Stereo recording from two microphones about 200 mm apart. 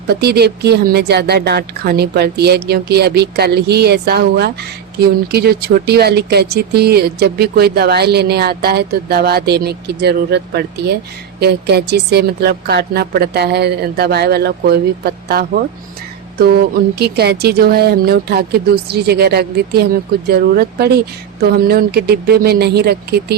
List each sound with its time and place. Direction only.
0.1 s speech: 55° right (ahead or behind)
17.0 s speech: 55° right (ahead or behind)